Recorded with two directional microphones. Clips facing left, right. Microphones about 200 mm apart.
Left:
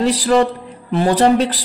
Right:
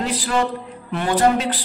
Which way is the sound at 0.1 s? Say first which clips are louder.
Left 7 dB; 35° left (ahead or behind).